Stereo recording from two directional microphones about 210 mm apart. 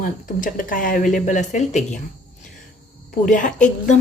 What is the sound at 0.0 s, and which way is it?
Speech, 40° left (ahead or behind).